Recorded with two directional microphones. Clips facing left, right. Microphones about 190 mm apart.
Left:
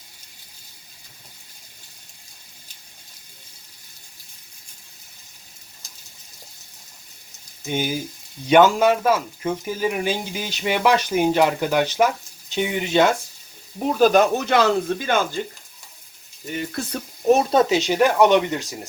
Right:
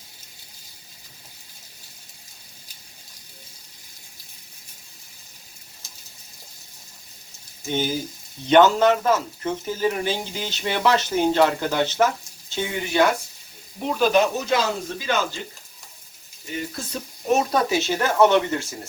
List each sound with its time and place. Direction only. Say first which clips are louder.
7.7 s speech: even; 10° left (ahead or behind)
14.0 s speech: left 3 dB; 45° left (ahead or behind)
14.3 s speech: left 5 dB; 60° left (ahead or behind)
17.2 s speech: left 4 dB; 35° left (ahead or behind)
17.7 s speech: left 4 dB; 15° left (ahead or behind)